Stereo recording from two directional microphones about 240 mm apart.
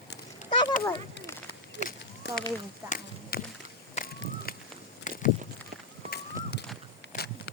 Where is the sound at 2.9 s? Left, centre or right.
Left.